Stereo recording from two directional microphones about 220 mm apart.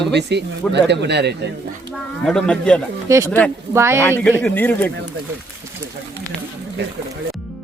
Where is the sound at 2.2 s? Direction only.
5° left (ahead or behind).